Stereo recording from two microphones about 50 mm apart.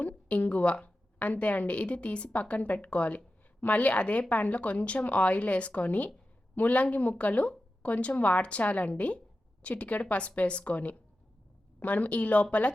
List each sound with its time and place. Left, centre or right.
0.0 s a woman's voice: left